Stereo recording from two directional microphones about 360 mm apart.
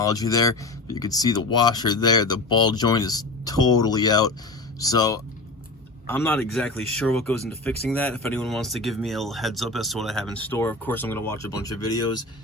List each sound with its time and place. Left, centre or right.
0.0 s speech: centre